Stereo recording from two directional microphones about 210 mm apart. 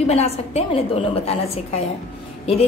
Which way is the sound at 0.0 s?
30° left (ahead or behind).